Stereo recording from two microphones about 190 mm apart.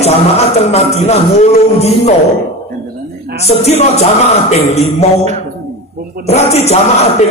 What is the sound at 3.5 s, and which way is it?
Music, 35° left (ahead or behind).